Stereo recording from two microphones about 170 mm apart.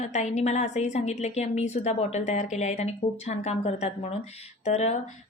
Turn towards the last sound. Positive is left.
turn(degrees=40)  # may be behind; listen again after turning